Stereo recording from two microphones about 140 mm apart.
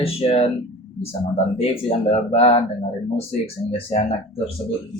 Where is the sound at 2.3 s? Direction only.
45° left (ahead or behind).